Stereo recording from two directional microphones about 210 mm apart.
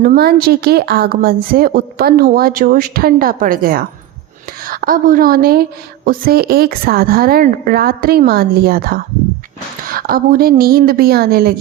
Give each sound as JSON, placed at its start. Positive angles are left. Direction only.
{"t": 0.0, "sound": "a woman's voice", "side_deg": -45}